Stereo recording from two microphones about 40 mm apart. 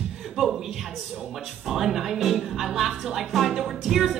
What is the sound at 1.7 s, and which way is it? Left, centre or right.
A woman's voice, centre.